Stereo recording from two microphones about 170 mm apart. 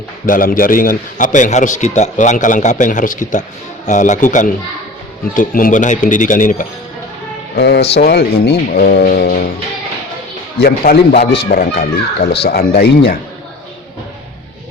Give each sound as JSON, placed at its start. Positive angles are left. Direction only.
{"t": 0.3, "sound": "a man's voice", "side_deg": 55}
{"t": 7.5, "sound": "speech", "side_deg": 75}
{"t": 10.6, "sound": "a man's voice", "side_deg": 65}